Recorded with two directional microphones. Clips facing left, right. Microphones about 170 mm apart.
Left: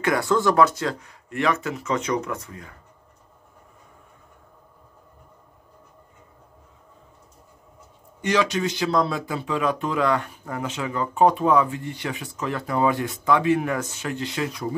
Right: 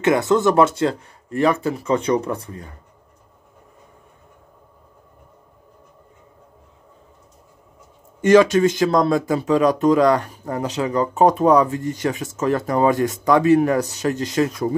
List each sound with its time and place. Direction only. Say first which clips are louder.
0.0 s speech: right 5 dB; 20° right (ahead or behind)
8.2 s speech: right 10 dB; 50° right (ahead or behind)